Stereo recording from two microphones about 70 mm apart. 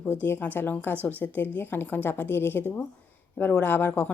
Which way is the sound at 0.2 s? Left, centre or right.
Left.